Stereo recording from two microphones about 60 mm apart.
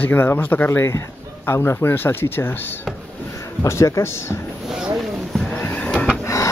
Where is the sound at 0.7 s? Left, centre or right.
Left.